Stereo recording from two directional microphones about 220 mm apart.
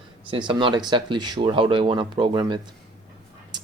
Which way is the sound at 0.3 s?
20° right (ahead or behind).